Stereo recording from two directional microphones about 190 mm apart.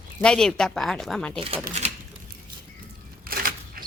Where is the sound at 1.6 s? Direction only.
35° right (ahead or behind).